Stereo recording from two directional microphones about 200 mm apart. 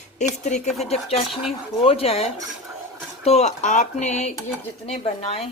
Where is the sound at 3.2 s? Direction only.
30° left (ahead or behind).